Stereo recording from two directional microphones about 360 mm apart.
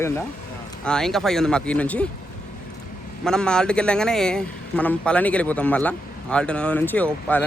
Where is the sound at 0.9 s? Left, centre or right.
Centre.